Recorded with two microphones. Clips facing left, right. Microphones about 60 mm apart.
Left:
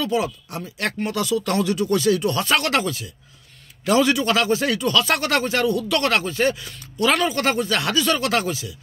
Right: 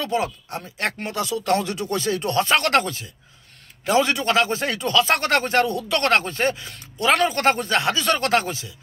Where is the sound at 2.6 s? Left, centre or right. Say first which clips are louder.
Right 2 dB; right.